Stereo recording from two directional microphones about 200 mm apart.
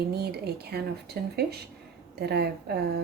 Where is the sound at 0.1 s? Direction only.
55° right (ahead or behind).